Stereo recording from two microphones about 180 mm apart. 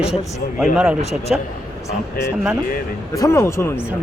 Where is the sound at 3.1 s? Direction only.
15° left (ahead or behind).